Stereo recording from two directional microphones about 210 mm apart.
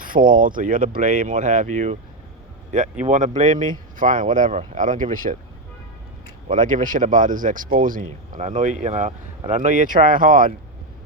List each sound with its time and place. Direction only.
0.0 s speech: 40° right (ahead or behind)
3.0 s speech: 35° right (ahead or behind)
6.5 s speech: 40° right (ahead or behind)